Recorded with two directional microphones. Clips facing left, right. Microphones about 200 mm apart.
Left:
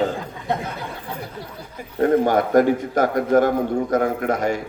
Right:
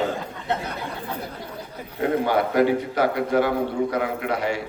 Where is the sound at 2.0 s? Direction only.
45° left (ahead or behind).